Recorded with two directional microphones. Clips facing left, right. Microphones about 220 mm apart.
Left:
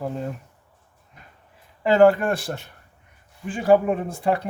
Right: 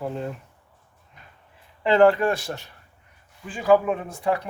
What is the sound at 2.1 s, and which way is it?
Speech, 50° left (ahead or behind).